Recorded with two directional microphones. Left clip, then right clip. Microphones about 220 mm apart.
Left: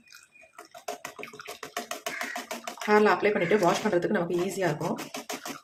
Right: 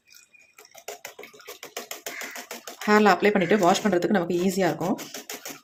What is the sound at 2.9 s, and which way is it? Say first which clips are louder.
Speech: right 3 dB; 40° right (ahead or behind).